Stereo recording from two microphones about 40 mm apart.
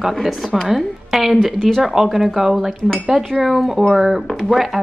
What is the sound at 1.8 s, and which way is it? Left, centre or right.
A woman's voice, centre.